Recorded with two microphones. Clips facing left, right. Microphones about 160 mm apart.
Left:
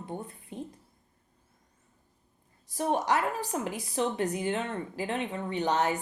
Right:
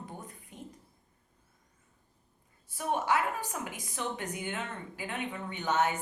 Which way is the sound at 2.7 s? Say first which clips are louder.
Left 3 dB; 35° left (ahead or behind).